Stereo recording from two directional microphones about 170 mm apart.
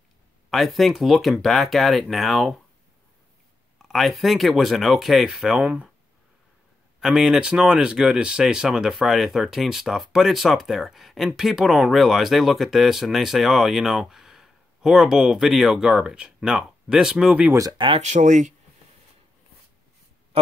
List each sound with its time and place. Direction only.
0.5 s speech: centre (ahead or behind)
3.7 s speech: centre (ahead or behind)
7.0 s speech: 5° right (ahead or behind)
17.6 s speech: 25° right (ahead or behind)
18.0 s speech: 45° right (ahead or behind)